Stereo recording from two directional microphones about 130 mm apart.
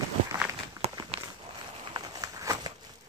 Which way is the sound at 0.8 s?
50° right (ahead or behind).